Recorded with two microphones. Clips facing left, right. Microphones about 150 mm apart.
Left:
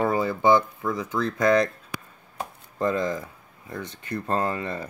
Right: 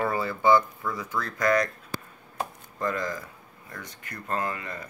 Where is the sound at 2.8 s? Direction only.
25° left (ahead or behind).